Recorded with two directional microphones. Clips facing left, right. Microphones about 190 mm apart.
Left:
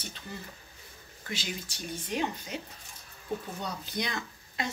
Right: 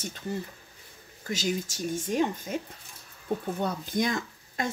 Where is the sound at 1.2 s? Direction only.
45° right (ahead or behind).